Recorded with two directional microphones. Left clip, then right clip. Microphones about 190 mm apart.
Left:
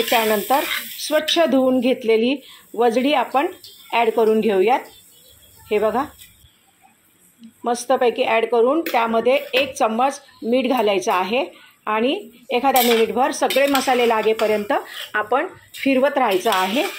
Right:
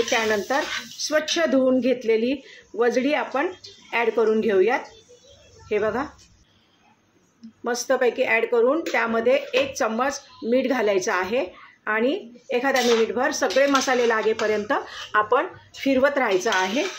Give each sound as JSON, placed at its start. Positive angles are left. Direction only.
{"t": 0.1, "sound": "speech", "side_deg": 10}
{"t": 7.6, "sound": "speech", "side_deg": 10}